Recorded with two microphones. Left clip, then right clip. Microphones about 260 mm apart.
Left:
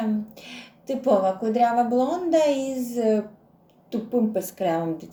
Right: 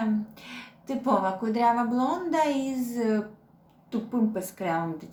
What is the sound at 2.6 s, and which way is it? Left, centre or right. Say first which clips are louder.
Speech: left 5 dB; right.